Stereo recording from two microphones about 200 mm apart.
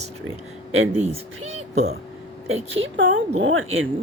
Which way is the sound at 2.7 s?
70° right (ahead or behind).